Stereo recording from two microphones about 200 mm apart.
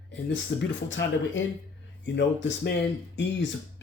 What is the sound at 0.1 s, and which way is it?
Speech, 65° left (ahead or behind).